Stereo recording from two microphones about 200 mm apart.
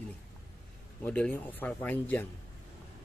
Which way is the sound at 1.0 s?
5° left (ahead or behind).